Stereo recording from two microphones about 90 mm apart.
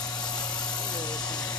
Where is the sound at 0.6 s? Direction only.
50° left (ahead or behind).